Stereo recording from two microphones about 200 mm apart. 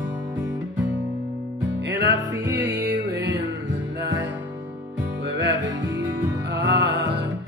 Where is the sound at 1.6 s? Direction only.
65° right (ahead or behind).